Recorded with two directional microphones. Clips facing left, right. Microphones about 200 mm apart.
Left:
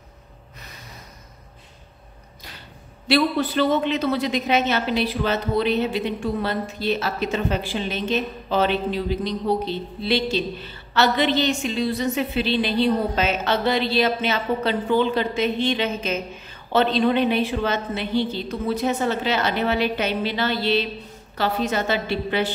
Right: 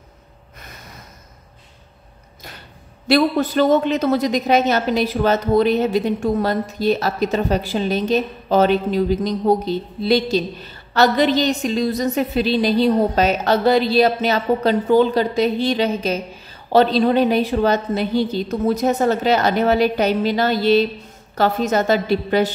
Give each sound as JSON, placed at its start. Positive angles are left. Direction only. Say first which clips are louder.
{"t": 3.1, "sound": "a woman's voice", "louder": "right 4 dB", "side_deg": -40}